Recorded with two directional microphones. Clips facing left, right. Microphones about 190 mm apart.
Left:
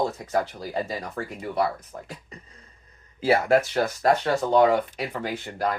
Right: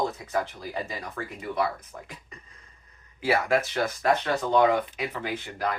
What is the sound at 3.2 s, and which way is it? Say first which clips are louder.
Speech: left 4 dB; 35° left (ahead or behind).